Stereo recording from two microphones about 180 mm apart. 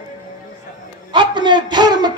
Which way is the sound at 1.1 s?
25° right (ahead or behind).